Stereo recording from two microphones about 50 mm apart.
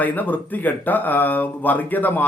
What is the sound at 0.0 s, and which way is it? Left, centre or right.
Speech, left.